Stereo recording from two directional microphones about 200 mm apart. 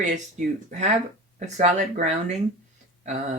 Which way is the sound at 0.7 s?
35° right (ahead or behind).